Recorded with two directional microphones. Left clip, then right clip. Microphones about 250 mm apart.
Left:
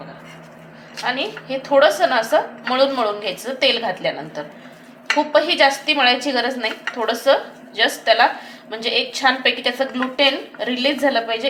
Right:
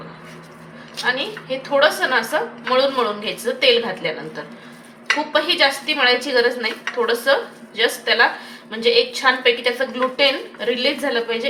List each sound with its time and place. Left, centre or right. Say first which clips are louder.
1.0 s a woman's voice: right 1 dB; left
5.3 s a woman's voice: left 2 dB; left